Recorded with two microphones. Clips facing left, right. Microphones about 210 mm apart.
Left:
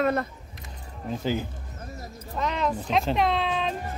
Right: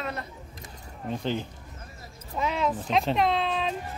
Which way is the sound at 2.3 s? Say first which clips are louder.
Even; 5° right (ahead or behind).